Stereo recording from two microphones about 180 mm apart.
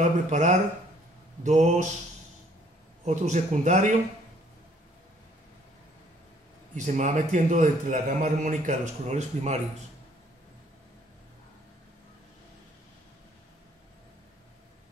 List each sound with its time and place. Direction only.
0.0 s a man's voice: 40° right (ahead or behind)
3.1 s a man's voice: 40° right (ahead or behind)
6.7 s a man's voice: 45° right (ahead or behind)